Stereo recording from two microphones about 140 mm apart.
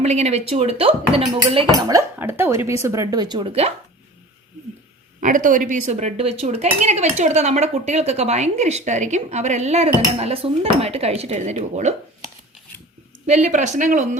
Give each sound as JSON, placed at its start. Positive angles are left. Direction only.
{"t": 0.0, "sound": "speech", "side_deg": -50}
{"t": 1.7, "sound": "speech", "side_deg": -25}
{"t": 5.2, "sound": "speech", "side_deg": -70}
{"t": 13.2, "sound": "speech", "side_deg": -60}